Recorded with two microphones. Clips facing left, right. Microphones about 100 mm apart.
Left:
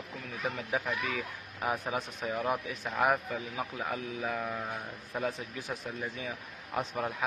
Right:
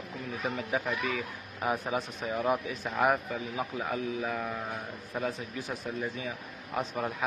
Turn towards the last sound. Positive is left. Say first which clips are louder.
# right 1 dB
turn(degrees=0)  # may be behind; listen again after turning